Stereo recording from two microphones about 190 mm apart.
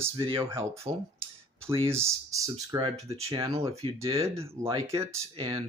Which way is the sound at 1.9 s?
15° right (ahead or behind).